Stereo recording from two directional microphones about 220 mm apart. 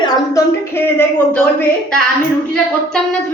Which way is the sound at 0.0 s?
15° left (ahead or behind).